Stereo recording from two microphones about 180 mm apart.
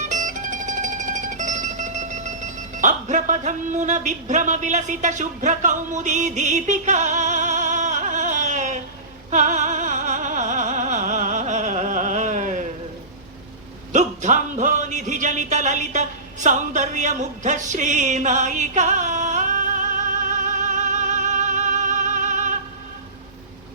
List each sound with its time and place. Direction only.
0.0 s music: 45° right (ahead or behind)
13.9 s music: 40° right (ahead or behind)